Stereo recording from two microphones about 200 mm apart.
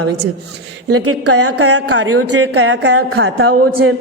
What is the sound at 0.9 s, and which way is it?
A woman's voice, 90° right.